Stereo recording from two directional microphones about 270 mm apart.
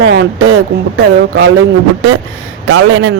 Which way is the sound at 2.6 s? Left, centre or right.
Right.